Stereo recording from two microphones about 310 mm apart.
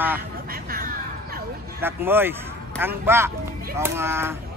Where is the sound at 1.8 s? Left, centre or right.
Centre.